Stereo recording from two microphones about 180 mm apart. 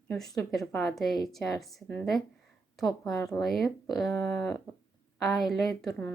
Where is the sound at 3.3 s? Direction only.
5° left (ahead or behind).